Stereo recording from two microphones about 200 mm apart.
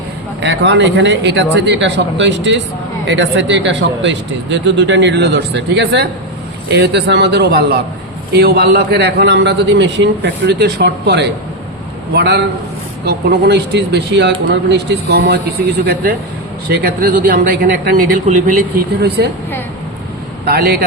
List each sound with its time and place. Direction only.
0.4 s speech: 65° right (ahead or behind); by 18.6 s 40° right (ahead or behind)
19.0 s speech: 55° right (ahead or behind)
20.4 s speech: 50° right (ahead or behind)